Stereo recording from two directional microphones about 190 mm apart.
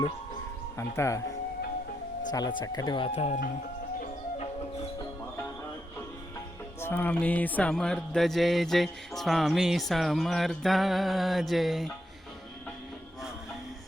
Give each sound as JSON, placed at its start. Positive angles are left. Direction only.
{"t": 0.8, "sound": "speech", "side_deg": 15}
{"t": 2.3, "sound": "speech", "side_deg": 20}
{"t": 4.0, "sound": "music", "side_deg": 35}
{"t": 6.7, "sound": "speech", "side_deg": 10}